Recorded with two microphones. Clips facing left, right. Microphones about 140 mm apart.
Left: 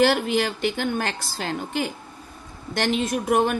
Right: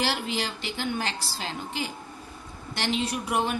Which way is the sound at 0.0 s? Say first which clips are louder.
Left 9 dB; 55° left (ahead or behind).